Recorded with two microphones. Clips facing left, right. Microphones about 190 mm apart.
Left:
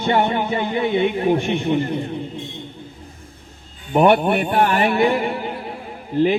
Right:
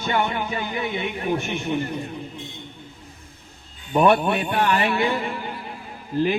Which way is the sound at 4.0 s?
30° left (ahead or behind).